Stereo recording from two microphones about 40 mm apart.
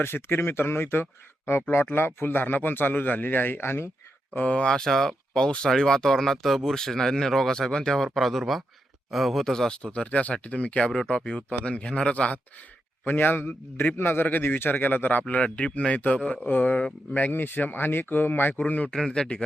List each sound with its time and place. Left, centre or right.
0.0 s speech: left
1.7 s a man's voice: left
4.4 s speech: left
4.6 s speech: centre
7.9 s speech: centre
9.4 s speech: centre; by 12.4 s left
13.1 s a man's voice: left
13.9 s a man's voice: left
14.3 s a man's voice: left
15.4 s speech: left
16.5 s a man's voice: left
18.9 s speech: centre